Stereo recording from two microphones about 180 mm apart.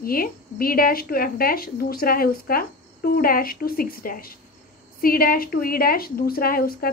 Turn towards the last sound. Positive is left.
turn(degrees=55)  # may be behind; listen again after turning